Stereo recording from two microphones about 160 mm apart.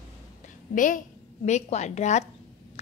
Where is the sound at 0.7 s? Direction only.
55° left (ahead or behind).